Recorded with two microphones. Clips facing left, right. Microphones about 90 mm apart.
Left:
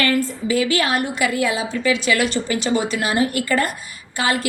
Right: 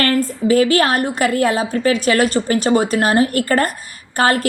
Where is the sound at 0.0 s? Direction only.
45° right (ahead or behind).